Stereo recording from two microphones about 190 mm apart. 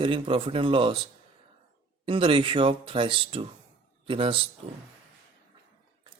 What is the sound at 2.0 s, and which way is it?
A man's voice, 25° right (ahead or behind).